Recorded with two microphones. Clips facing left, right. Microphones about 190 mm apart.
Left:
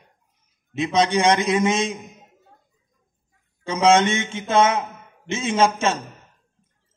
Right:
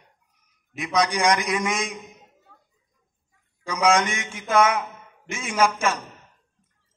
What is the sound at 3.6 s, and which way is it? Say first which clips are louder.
Speech: left 4 dB; 25° left (ahead or behind).